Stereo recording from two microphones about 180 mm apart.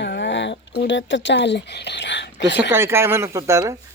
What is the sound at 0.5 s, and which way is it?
Speech, 70° left (ahead or behind).